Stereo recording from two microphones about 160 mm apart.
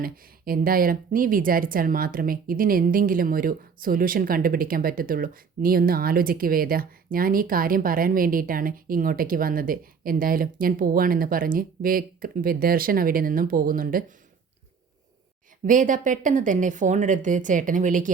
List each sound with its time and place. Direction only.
0.0 s speech: 65° right (ahead or behind)
15.6 s speech: 55° right (ahead or behind)